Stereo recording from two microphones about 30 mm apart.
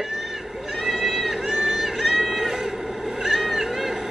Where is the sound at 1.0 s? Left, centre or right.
Centre.